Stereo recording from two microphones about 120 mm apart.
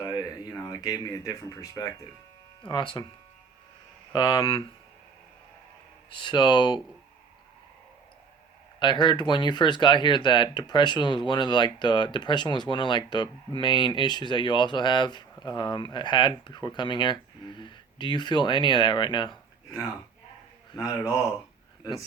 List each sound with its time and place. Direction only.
0.0 s a sound: 30° left (ahead or behind)
2.6 s speech: 45° left (ahead or behind)
4.1 s speech: 45° left (ahead or behind)
6.1 s speech: 40° left (ahead or behind)
8.8 s speech: 40° left (ahead or behind)
20.7 s speech: 30° left (ahead or behind)